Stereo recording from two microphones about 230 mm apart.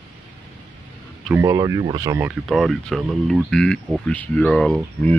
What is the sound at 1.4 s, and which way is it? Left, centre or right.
Speech, centre.